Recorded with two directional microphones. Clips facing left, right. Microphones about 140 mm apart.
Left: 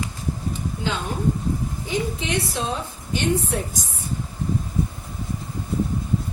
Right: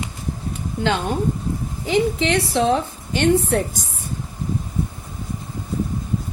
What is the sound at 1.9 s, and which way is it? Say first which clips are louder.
A woman's voice: right 8 dB; 85° right.